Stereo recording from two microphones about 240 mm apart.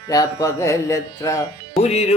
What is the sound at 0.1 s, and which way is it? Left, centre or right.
Speech, centre.